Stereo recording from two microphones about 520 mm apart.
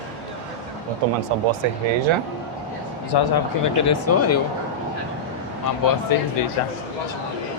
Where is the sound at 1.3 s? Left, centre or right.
Right.